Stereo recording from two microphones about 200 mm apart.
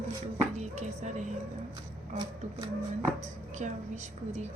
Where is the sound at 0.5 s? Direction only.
35° right (ahead or behind).